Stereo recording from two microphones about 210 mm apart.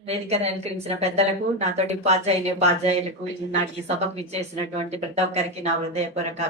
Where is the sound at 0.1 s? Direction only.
30° right (ahead or behind).